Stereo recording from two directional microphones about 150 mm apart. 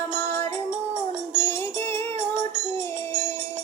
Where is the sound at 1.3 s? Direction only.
15° left (ahead or behind).